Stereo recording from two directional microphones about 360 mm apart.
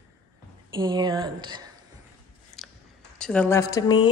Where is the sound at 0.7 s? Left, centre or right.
Centre.